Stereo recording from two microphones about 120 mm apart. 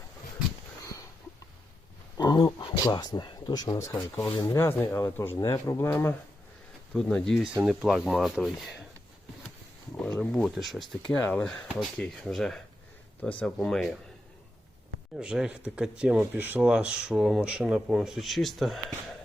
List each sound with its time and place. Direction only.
2.1 s a sound: 35° left (ahead or behind)
2.4 s speech: 40° left (ahead or behind); by 4.4 s 20° left (ahead or behind)
4.4 s speech: 30° left (ahead or behind)
4.6 s speech: 20° left (ahead or behind)
6.9 s speech: 5° left (ahead or behind)
10.2 s speech: 5° left (ahead or behind)
15.1 s speech: 5° right (ahead or behind)